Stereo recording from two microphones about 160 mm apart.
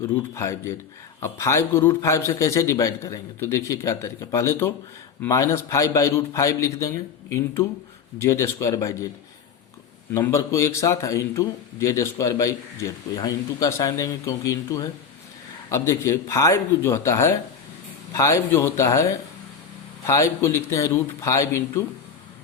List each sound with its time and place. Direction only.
0.0 s a man's voice: 20° left (ahead or behind)
10.1 s a man's voice: 20° left (ahead or behind)
20.1 s a man's voice: 20° left (ahead or behind)